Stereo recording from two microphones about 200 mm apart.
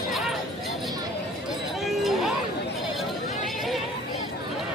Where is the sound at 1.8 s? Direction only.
Centre (ahead or behind).